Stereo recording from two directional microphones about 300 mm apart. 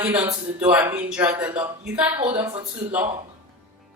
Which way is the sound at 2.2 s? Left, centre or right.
Centre.